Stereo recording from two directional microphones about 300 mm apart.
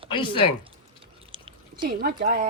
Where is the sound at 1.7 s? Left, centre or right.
Right.